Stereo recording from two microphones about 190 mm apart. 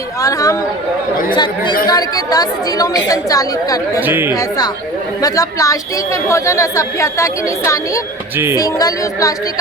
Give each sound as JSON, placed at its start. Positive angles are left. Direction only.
{"t": 0.2, "sound": "a woman's voice", "side_deg": 20}
{"t": 4.0, "sound": "speech", "side_deg": -10}
{"t": 4.4, "sound": "a woman's voice", "side_deg": 20}